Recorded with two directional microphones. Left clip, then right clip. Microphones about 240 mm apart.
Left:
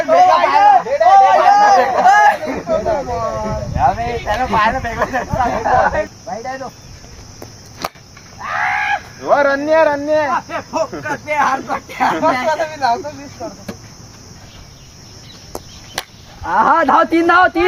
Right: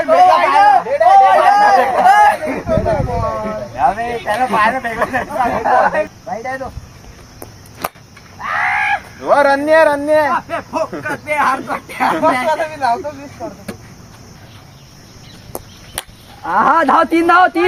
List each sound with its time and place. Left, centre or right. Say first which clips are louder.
0.0 s a sound: right 1 dB; centre
4.0 s a sound: even; centre
4.3 s speech: right 1 dB; centre
7.8 s a sound: right 1 dB; centre
8.4 s screaming: right 2 dB; right
9.2 s speech: right 2 dB; right
10.3 s speech: even; centre
12.5 s speech: even; centre
15.5 s chop: right 1 dB; centre
16.0 s cattle: left 3 dB; centre
16.4 s speech: even; right